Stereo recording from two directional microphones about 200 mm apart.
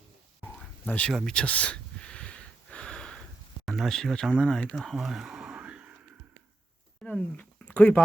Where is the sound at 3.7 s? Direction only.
Centre (ahead or behind).